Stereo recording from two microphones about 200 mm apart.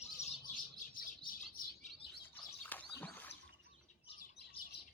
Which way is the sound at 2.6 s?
10° left (ahead or behind).